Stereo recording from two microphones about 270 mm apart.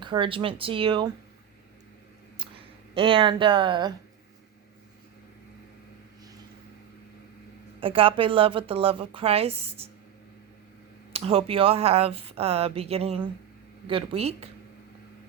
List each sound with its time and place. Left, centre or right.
0.0 s speech: centre
2.4 s speech: centre
7.8 s speech: centre
11.1 s speech: right